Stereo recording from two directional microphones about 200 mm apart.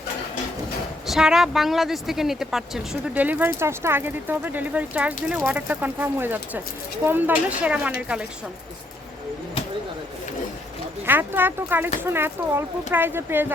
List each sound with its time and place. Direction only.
1.0 s speech: centre (ahead or behind)
11.0 s speech: 10° right (ahead or behind)